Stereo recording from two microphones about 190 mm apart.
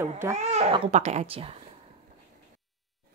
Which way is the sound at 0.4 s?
35° right (ahead or behind).